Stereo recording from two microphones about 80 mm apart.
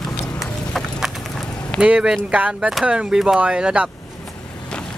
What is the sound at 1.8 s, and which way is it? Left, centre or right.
Speech, centre.